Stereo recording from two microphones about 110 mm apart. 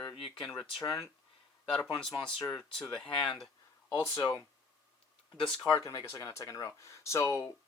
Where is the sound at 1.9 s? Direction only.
55° left (ahead or behind).